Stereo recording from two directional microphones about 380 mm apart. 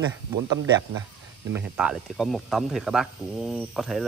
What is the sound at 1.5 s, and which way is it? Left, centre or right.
Speech, centre.